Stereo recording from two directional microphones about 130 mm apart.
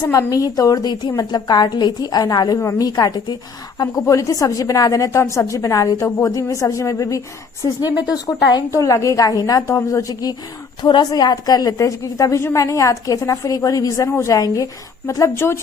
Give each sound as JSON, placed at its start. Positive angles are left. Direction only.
{"t": 0.0, "sound": "a woman's voice", "side_deg": 25}
{"t": 7.9, "sound": "speech", "side_deg": -10}
{"t": 8.5, "sound": "a woman's voice", "side_deg": 25}